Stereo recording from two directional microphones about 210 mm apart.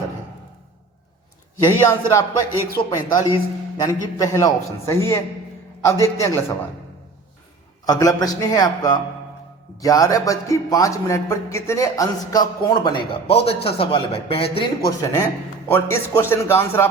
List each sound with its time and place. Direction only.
1.9 s a man's voice: 15° left (ahead or behind)
7.9 s a man's voice: 15° left (ahead or behind)